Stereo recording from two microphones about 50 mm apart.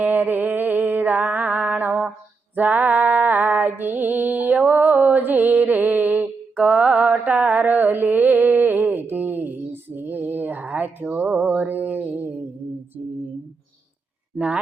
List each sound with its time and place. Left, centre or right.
0.0 s music: right
14.3 s speech: right